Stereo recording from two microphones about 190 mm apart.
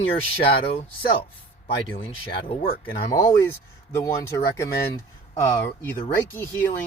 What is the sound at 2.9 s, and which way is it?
Speech, 20° left (ahead or behind).